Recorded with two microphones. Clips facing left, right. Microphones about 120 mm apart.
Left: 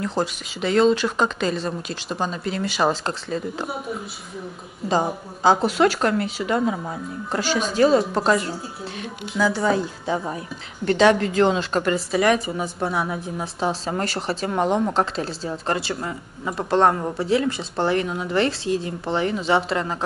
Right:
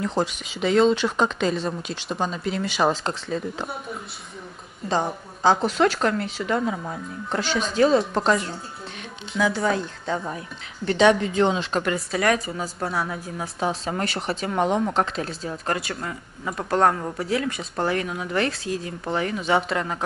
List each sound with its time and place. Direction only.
0.0 s a woman's voice: centre (ahead or behind)
4.8 s a woman's voice: 5° left (ahead or behind)
13.2 s speech: 25° left (ahead or behind)
14.5 s a woman's voice: 5° left (ahead or behind)
15.1 s speech: 30° left (ahead or behind)